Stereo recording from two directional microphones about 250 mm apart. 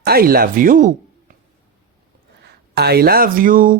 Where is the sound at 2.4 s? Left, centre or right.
Right.